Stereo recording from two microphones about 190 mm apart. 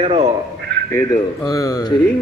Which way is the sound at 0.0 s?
35° right (ahead or behind).